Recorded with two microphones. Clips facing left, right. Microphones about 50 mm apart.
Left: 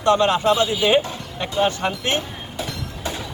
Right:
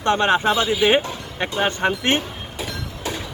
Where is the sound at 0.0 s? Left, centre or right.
Right.